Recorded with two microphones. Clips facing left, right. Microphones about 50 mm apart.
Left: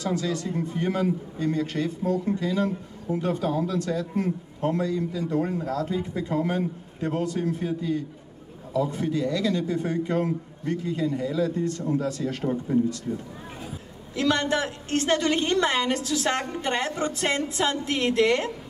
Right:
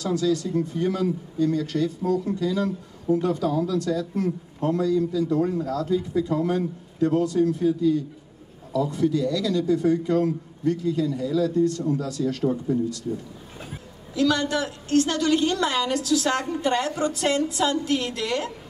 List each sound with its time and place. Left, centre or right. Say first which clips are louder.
0.0 s a man's voice: right 4 dB; left
14.1 s a woman's voice: right 1 dB; left